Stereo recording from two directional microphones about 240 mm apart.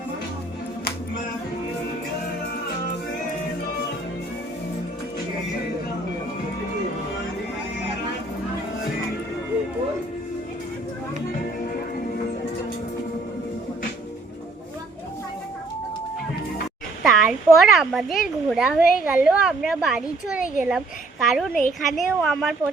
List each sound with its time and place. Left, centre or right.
17.0 s speech: centre